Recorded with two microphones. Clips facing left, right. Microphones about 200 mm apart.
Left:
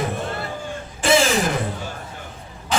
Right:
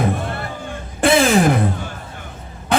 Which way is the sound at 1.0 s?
60° right (ahead or behind).